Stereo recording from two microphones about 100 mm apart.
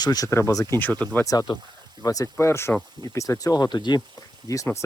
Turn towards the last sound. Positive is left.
turn(degrees=35)  # may be behind; listen again after turning